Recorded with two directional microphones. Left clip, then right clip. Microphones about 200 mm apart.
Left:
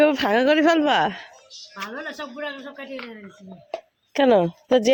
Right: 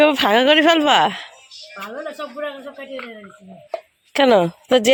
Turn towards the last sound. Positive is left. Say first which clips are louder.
# right 3 dB
turn(degrees=0)  # may be behind; listen again after turning